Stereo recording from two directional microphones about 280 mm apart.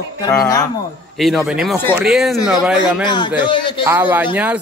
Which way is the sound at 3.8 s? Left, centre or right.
Centre.